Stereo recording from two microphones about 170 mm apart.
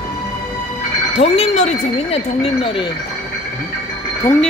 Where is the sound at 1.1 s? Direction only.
40° left (ahead or behind).